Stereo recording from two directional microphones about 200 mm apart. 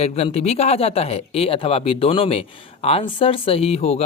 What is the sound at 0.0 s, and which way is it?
Speech, 30° left (ahead or behind).